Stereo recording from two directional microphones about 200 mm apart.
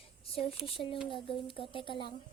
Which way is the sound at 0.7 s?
25° left (ahead or behind).